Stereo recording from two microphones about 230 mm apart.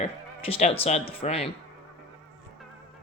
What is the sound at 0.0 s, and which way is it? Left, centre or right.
Speech, left.